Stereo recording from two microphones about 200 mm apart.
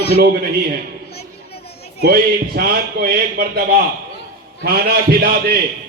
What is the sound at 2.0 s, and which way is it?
A man's voice, 50° right (ahead or behind).